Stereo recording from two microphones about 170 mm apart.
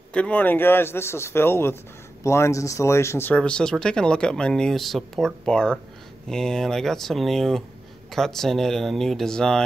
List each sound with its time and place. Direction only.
0.1 s a man's voice: 10° left (ahead or behind)